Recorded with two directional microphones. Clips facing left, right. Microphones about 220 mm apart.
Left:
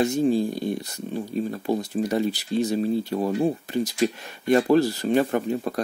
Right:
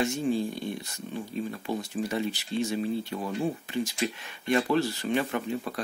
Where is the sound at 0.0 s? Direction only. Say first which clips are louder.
Left 6 dB; 35° left (ahead or behind).